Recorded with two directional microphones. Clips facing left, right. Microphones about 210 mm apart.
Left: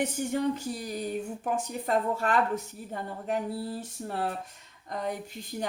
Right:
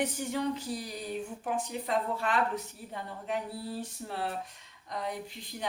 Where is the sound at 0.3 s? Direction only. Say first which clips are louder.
Left 3 dB; 50° left (ahead or behind).